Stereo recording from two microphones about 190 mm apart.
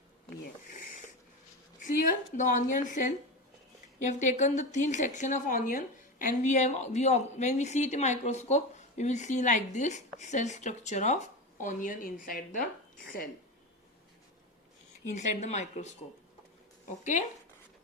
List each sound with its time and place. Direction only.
1.8 s a woman's voice: 40° left (ahead or behind)
15.1 s a woman's voice: 35° left (ahead or behind)
17.0 s a woman's voice: 40° left (ahead or behind)